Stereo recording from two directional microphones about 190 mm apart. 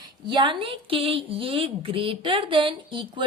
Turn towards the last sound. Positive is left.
turn(degrees=-25)  # may be behind; listen again after turning